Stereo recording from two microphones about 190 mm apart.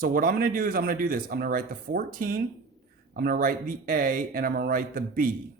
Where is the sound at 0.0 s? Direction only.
45° right (ahead or behind).